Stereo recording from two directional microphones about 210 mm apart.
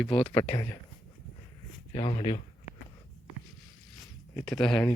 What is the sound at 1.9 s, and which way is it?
Speech, 25° left (ahead or behind).